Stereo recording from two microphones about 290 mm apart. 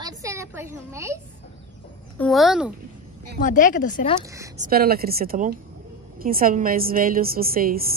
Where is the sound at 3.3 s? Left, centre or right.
Left.